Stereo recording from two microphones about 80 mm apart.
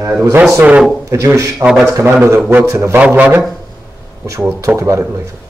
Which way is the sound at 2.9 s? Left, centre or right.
Centre.